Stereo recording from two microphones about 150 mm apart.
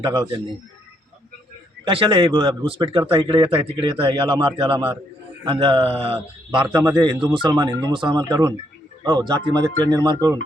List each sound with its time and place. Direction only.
0.0 s a man's voice: 30° right (ahead or behind)
1.8 s a man's voice: 35° right (ahead or behind)